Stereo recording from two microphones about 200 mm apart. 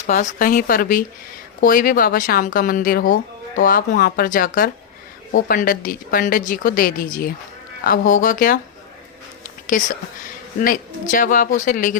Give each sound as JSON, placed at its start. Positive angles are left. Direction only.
{"t": 0.1, "sound": "a woman's voice", "side_deg": 40}
{"t": 9.7, "sound": "speech", "side_deg": 40}